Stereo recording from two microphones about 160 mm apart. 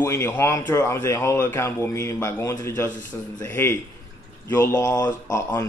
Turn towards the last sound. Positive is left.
turn(degrees=20)  # may be behind; listen again after turning